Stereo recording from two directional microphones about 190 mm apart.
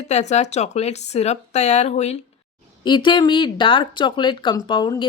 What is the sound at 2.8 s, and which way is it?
Speech, 25° left (ahead or behind).